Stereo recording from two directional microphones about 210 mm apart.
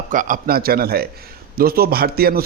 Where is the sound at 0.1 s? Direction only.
40° right (ahead or behind).